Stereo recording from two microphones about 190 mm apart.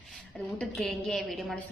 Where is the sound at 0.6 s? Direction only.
Centre (ahead or behind).